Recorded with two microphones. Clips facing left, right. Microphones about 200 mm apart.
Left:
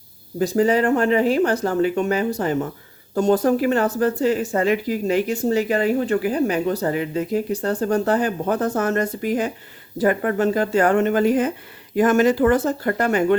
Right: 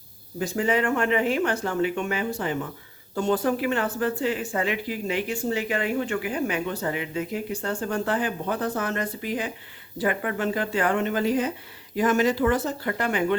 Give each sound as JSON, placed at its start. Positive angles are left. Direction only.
{"t": 0.3, "sound": "speech", "side_deg": 40}